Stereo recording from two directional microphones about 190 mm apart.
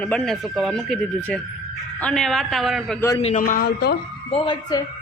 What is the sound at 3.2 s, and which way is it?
Speech, 40° left (ahead or behind).